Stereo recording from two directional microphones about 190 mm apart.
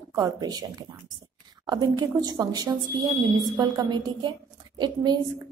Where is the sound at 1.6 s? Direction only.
20° right (ahead or behind).